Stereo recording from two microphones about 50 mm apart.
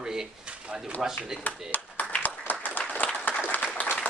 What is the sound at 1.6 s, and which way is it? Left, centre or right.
Clapping, left.